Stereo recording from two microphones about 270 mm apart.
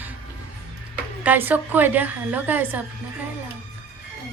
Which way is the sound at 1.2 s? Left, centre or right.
Centre.